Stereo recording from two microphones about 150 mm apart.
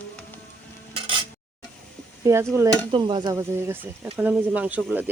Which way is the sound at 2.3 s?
20° right (ahead or behind).